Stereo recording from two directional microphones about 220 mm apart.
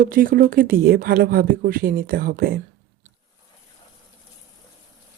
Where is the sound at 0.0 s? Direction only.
40° right (ahead or behind).